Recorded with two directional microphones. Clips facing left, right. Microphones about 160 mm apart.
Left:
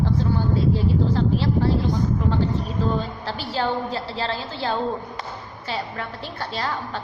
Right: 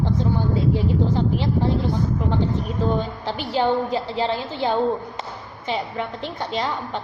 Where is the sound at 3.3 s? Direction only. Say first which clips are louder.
Right 5 dB; 15° right (ahead or behind).